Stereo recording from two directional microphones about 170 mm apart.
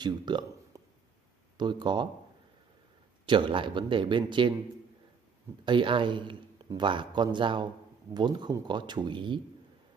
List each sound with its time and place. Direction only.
0.0 s a sound: 25° right (ahead or behind)
1.6 s a man's voice: 25° right (ahead or behind)
3.3 s a man's voice: 30° right (ahead or behind)
5.7 s a man's voice: 30° right (ahead or behind)